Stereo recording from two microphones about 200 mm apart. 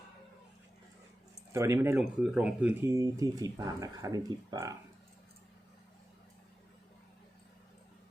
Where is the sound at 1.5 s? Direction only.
15° right (ahead or behind).